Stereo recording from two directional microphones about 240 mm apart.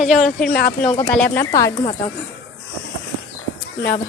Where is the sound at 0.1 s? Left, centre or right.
Centre.